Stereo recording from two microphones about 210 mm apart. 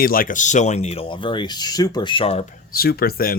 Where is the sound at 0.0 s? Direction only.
45° left (ahead or behind); by 2.4 s 25° left (ahead or behind).